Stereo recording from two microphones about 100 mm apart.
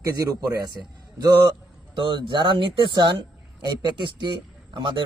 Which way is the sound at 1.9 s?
55° right (ahead or behind).